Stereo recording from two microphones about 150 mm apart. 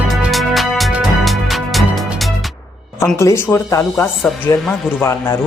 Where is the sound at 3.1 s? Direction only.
15° left (ahead or behind).